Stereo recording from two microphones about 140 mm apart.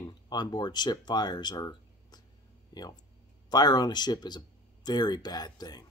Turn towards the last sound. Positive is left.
turn(degrees=30)  # may be behind; listen again after turning